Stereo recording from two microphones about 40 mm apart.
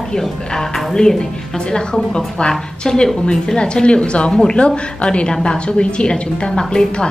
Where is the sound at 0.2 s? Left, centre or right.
Centre.